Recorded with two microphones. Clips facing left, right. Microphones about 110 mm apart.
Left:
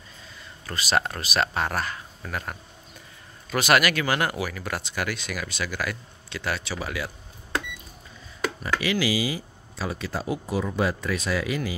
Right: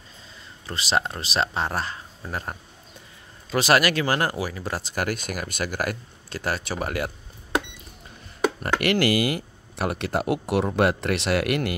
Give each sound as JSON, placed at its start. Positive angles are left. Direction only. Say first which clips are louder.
{"t": 0.7, "sound": "speech", "louder": "even", "side_deg": -25}
{"t": 4.9, "sound": "speech", "louder": "right 5 dB", "side_deg": -45}
{"t": 8.7, "sound": "speech", "louder": "right 3 dB", "side_deg": -60}